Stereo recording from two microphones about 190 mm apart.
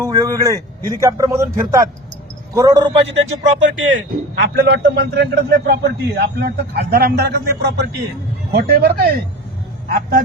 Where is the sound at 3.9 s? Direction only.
55° right (ahead or behind).